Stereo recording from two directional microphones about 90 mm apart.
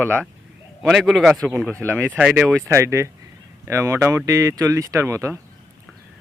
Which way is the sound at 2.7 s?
30° right (ahead or behind).